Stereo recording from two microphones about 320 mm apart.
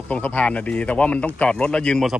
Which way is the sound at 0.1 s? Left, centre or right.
Centre.